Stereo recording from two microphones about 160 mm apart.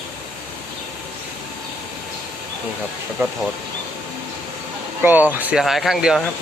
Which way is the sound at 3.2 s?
15° right (ahead or behind).